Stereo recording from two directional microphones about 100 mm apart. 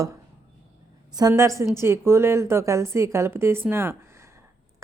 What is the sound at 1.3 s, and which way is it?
A woman's voice, 30° right (ahead or behind).